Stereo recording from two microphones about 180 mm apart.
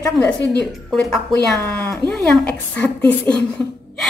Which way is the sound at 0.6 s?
Centre (ahead or behind).